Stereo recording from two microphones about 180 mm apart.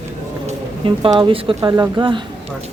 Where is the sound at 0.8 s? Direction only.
30° right (ahead or behind).